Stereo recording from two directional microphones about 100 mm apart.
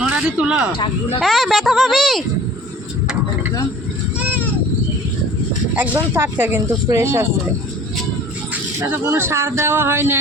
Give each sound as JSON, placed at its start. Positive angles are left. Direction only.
{"t": 0.0, "sound": "speech", "side_deg": -10}
{"t": 1.2, "sound": "a woman's voice", "side_deg": 0}
{"t": 5.7, "sound": "speech", "side_deg": -15}
{"t": 8.9, "sound": "speech", "side_deg": -25}